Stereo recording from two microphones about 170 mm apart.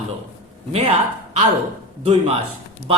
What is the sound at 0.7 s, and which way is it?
Speech, 35° right (ahead or behind).